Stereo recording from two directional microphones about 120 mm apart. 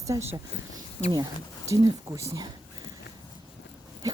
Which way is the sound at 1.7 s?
30° right (ahead or behind).